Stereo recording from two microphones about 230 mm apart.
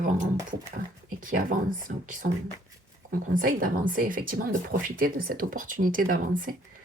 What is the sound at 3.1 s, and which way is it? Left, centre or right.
Speech, right.